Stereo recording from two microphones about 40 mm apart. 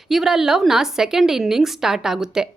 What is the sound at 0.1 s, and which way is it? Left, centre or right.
Speech, centre.